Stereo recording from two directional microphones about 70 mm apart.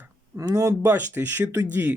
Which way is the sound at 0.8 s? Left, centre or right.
Right.